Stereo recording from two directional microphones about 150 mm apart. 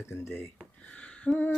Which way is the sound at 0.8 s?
10° left (ahead or behind).